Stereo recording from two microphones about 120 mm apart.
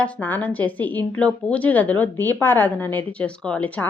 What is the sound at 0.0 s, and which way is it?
A woman's voice, 15° left (ahead or behind).